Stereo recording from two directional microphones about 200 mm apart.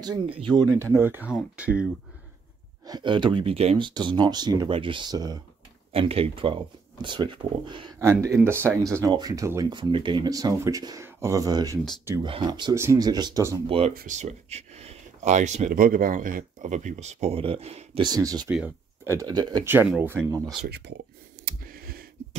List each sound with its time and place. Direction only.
0.0 s speech: 25° right (ahead or behind)
0.7 s speech: 15° right (ahead or behind)
2.9 s speech: 25° right (ahead or behind)
12.3 s speech: 25° right (ahead or behind)
13.7 s speech: 30° right (ahead or behind)
18.5 s speech: 5° right (ahead or behind)
19.1 s speech: 20° right (ahead or behind)
20.6 s speech: 55° right (ahead or behind)
21.5 s a sound: 50° right (ahead or behind)